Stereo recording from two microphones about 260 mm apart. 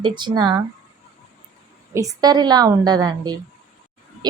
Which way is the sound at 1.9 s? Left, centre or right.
Centre.